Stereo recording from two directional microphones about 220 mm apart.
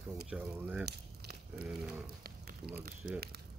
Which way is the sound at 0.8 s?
45° right (ahead or behind).